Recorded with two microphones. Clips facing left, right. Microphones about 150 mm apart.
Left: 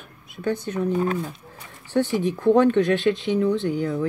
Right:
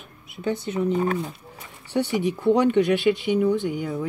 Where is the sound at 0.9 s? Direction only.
25° right (ahead or behind).